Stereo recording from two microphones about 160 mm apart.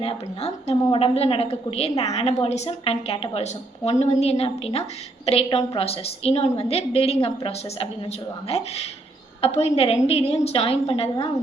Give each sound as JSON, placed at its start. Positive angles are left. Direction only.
{"t": 0.0, "sound": "a woman's voice", "side_deg": 40}